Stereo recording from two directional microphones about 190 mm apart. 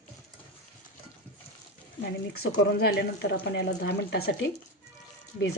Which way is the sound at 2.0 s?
60° left (ahead or behind).